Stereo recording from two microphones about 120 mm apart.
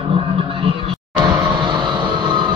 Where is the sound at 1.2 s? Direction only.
25° right (ahead or behind).